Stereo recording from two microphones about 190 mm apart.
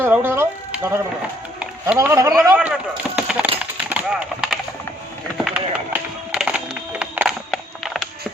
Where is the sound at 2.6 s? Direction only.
5° right (ahead or behind).